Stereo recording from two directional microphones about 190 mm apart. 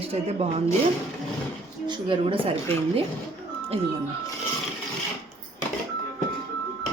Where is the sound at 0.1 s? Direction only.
30° right (ahead or behind).